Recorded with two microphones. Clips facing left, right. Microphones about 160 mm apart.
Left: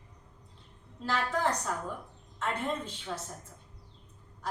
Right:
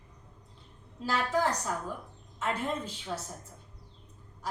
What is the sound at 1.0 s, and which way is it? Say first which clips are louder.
A woman's voice: right 1 dB; 5° right (ahead or behind).